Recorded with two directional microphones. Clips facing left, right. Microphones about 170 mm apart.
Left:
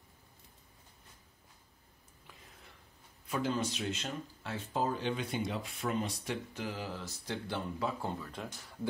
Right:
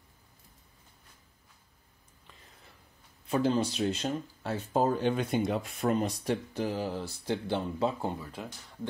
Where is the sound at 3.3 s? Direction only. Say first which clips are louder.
Right 6 dB; 30° right (ahead or behind).